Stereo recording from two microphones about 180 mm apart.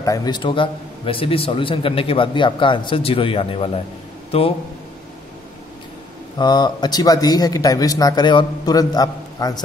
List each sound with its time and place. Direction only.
0.0 s a man's voice: 20° left (ahead or behind)
6.3 s a man's voice: 25° left (ahead or behind)